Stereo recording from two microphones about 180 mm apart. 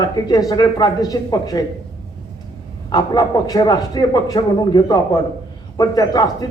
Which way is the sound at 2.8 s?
20° left (ahead or behind).